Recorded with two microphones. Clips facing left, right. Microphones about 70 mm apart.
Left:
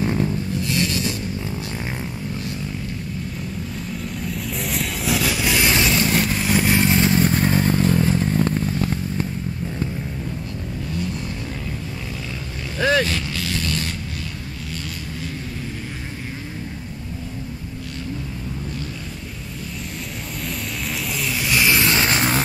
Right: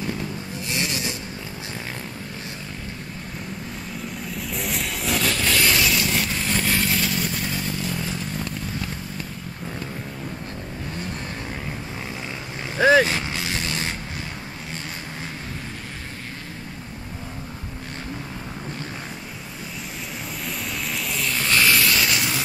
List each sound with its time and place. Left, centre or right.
0.7 s a sound: right
4.3 s vehicle: centre; by 6.2 s left
6.2 s motorcycle: centre; by 9.3 s left
12.7 s vehicle: centre
20.4 s music: centre; by 22.4 s left